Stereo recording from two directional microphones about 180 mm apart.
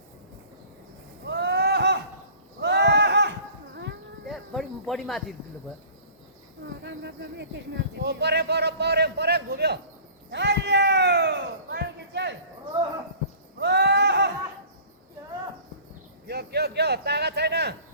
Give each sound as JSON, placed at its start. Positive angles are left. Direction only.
{"t": 1.2, "sound": "a sound", "side_deg": -75}
{"t": 4.3, "sound": "snake", "side_deg": 0}
{"t": 6.8, "sound": "a man's voice", "side_deg": -75}
{"t": 10.3, "sound": "a sound", "side_deg": -70}
{"t": 13.6, "sound": "horse", "side_deg": -70}
{"t": 16.2, "sound": "a man's voice", "side_deg": -65}